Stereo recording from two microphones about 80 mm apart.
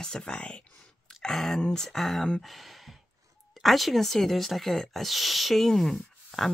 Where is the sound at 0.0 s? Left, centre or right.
Centre.